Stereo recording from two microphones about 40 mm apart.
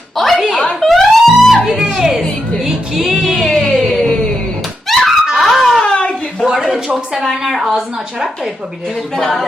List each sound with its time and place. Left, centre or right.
0.2 s a sound: centre
0.8 s music: centre
1.6 s music: centre
3.4 s music: centre
4.9 s a sound: centre
5.3 s dog: centre
5.8 s a sound: left
6.4 s a woman's voice: centre
9.1 s a woman's voice: centre